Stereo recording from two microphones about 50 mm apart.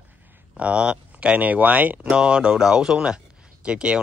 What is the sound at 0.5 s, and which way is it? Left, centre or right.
Speech, right.